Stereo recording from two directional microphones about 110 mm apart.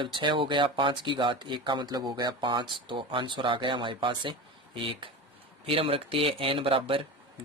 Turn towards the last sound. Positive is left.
turn(degrees=-55)  # may be behind; listen again after turning